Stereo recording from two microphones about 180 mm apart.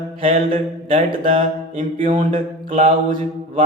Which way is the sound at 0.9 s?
35° right (ahead or behind).